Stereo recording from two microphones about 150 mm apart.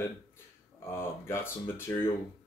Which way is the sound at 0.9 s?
15° left (ahead or behind).